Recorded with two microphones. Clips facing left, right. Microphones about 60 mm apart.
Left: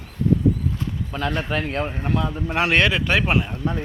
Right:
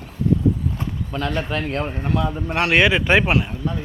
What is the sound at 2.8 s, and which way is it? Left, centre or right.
Speech, right.